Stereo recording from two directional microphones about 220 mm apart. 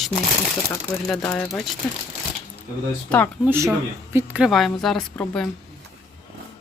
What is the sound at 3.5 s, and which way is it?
Speech, 15° right (ahead or behind).